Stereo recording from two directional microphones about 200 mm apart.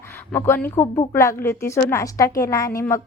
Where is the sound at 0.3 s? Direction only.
10° left (ahead or behind).